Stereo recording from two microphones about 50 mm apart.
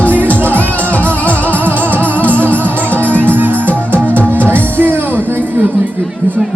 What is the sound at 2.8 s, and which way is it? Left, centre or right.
Music, left.